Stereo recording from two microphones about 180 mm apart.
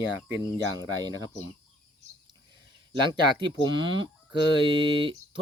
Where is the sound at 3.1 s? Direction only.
25° right (ahead or behind).